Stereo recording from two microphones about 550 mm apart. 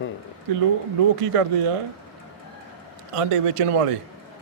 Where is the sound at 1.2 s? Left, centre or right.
Right.